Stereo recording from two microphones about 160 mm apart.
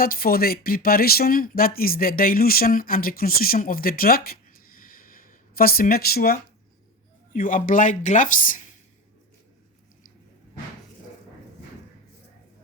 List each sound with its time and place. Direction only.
0.0 s speech: 65° left (ahead or behind)
4.8 s a sound: 65° left (ahead or behind)
7.3 s speech: 60° left (ahead or behind)